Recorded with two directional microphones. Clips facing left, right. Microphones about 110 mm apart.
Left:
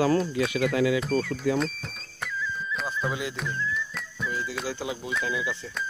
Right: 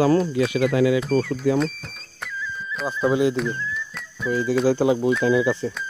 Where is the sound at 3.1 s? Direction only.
30° right (ahead or behind).